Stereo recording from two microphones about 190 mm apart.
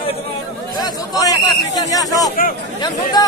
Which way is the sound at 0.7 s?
20° left (ahead or behind).